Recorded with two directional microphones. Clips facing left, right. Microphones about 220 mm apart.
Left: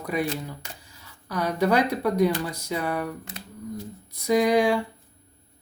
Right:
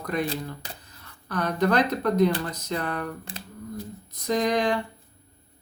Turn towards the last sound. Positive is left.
turn(degrees=10)  # may be behind; listen again after turning